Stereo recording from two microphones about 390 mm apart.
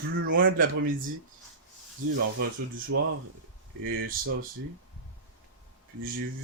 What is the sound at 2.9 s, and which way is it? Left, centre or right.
Speech, right.